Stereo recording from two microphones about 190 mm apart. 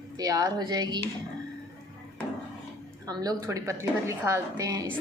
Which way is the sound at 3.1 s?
20° right (ahead or behind).